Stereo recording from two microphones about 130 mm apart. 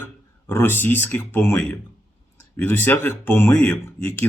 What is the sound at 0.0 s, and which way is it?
Speech, 20° left (ahead or behind).